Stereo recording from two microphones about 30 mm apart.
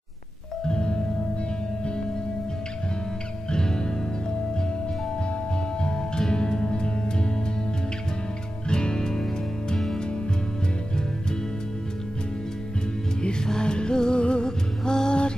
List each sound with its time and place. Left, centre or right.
0.7 s music: left
3.5 s music: left
5.8 s music: left
8.6 s music: left
13.5 s music: left